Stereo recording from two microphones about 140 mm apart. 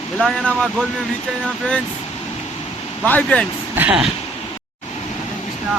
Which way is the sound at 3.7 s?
10° right (ahead or behind).